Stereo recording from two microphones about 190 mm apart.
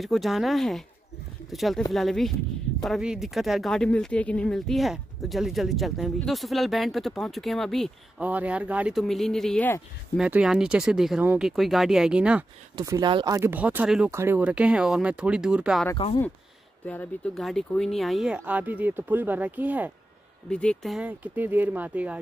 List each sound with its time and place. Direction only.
0.0 s speech: centre (ahead or behind)
12.7 s speech: 20° right (ahead or behind); by 15.9 s 5° right (ahead or behind)
16.8 s speech: 10° left (ahead or behind); by 19.9 s 10° right (ahead or behind)
20.4 s speech: 5° left (ahead or behind)